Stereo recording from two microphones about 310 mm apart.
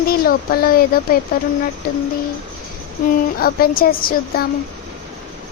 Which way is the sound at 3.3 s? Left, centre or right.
Left.